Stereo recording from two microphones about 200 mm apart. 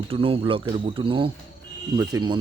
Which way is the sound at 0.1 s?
30° right (ahead or behind).